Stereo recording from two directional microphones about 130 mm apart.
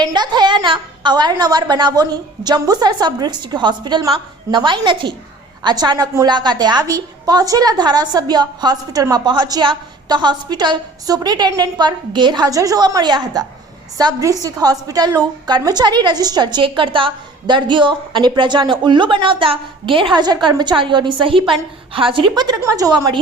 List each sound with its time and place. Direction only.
0.0 s a woman's voice: 35° right (ahead or behind)